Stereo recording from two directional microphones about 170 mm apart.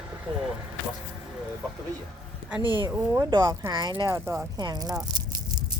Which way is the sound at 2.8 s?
15° right (ahead or behind).